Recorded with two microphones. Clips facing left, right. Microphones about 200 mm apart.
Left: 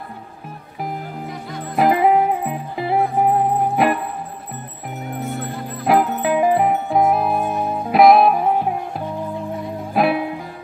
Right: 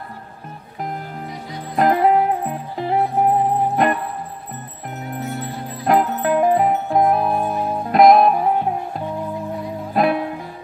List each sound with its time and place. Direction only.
1.8 s music: 5° left (ahead or behind)
5.4 s music: 55° left (ahead or behind)
5.9 s music: 5° left (ahead or behind)